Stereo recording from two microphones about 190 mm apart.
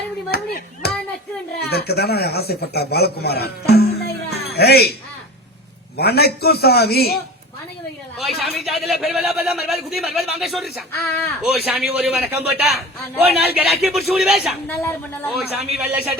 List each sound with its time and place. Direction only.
0.3 s a man's voice: 55° left (ahead or behind)
6.0 s a man's voice: 55° left (ahead or behind)
8.2 s a man's voice: centre (ahead or behind)
14.8 s speech: 10° left (ahead or behind)
15.4 s speech: 5° right (ahead or behind)